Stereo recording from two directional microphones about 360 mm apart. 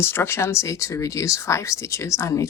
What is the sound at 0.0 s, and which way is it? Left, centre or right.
Speech, centre.